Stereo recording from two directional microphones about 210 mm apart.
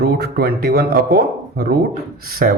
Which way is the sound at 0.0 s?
50° right (ahead or behind).